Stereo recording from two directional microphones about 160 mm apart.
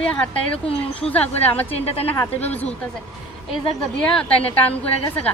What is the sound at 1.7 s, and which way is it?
Speech, 40° left (ahead or behind).